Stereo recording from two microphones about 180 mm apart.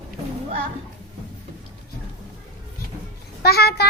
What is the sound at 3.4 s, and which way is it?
Speech, 60° left (ahead or behind).